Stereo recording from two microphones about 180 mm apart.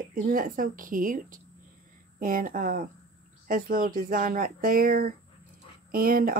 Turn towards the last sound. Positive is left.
turn(degrees=-55)  # may be behind; listen again after turning